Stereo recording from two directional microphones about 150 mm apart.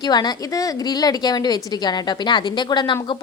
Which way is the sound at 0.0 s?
25° left (ahead or behind).